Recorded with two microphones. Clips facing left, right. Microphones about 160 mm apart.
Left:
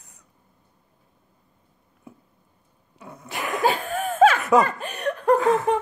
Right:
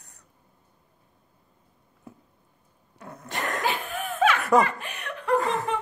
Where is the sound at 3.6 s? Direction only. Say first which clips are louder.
Left 6 dB; 40° left (ahead or behind).